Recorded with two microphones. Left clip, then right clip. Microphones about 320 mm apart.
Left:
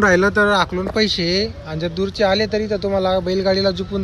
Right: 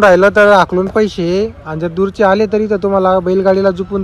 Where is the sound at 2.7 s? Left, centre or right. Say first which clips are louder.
Right 7 dB; right.